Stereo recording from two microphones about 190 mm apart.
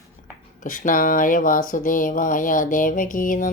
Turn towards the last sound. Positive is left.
turn(degrees=45)  # may be behind; listen again after turning